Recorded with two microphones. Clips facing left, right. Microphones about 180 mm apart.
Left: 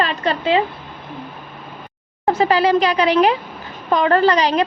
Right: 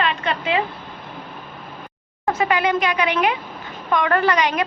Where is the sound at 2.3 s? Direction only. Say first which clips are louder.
Left 5 dB; 30° left (ahead or behind).